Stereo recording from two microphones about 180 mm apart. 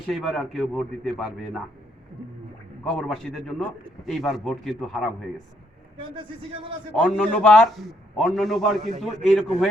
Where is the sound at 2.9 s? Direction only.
Centre (ahead or behind).